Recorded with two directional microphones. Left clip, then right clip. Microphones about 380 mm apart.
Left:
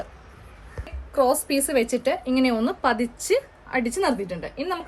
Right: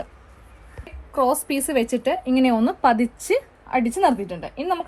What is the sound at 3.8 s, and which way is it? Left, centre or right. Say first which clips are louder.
Speech: right 5 dB; centre.